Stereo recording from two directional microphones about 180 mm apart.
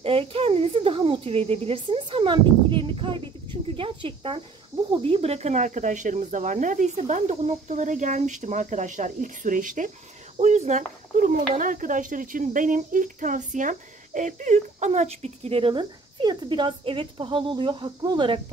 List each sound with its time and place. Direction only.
0.0 s speech: 30° right (ahead or behind)